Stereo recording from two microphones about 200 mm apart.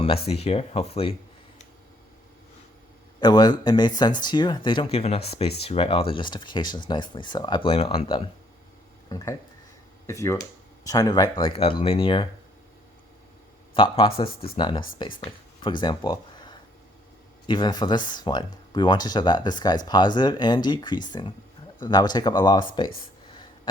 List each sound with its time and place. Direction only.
0.3 s speech: 30° left (ahead or behind)
3.2 s a man's voice: 20° left (ahead or behind)
13.7 s speech: 25° left (ahead or behind)